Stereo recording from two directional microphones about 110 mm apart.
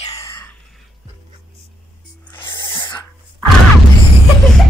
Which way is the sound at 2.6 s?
45° left (ahead or behind).